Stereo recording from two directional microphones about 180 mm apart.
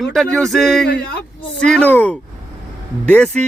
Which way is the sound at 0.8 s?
65° left (ahead or behind).